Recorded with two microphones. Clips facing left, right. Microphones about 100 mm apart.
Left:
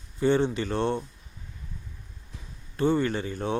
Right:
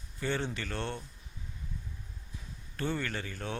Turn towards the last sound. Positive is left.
turn(degrees=25)  # may be behind; listen again after turning